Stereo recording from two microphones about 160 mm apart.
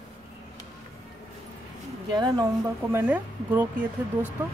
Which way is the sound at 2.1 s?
25° right (ahead or behind).